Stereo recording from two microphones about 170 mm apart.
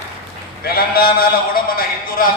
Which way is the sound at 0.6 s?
60° left (ahead or behind).